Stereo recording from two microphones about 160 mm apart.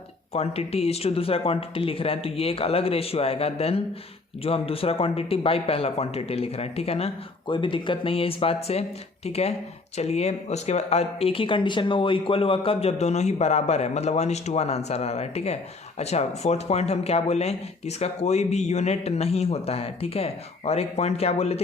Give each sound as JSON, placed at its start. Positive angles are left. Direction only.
{"t": 0.3, "sound": "speech", "side_deg": 40}